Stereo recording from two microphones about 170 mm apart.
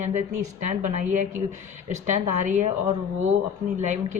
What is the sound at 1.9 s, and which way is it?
Speech, 45° right (ahead or behind).